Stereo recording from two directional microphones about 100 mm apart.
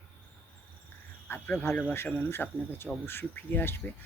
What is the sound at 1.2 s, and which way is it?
Speech, 15° left (ahead or behind).